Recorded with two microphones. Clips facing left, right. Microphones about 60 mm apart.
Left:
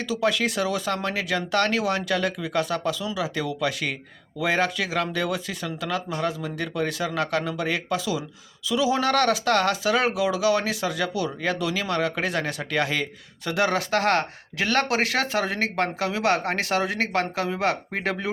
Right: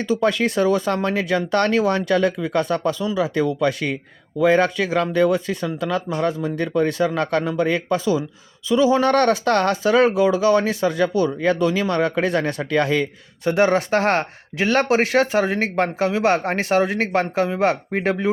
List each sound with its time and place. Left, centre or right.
0.0 s a man's voice: right